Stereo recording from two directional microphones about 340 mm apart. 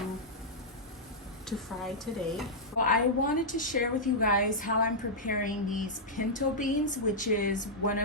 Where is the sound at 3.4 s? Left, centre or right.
Left.